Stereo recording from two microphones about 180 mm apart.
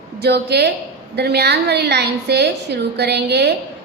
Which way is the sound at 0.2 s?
65° right (ahead or behind).